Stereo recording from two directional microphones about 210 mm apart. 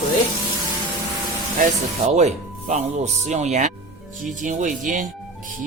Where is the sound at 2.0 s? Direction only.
35° right (ahead or behind).